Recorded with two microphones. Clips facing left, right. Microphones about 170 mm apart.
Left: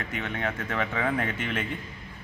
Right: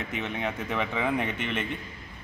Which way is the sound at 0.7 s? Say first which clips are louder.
Right 1 dB; centre (ahead or behind).